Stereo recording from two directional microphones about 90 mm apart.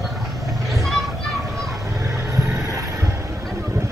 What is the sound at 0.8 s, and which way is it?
Children playing, centre (ahead or behind).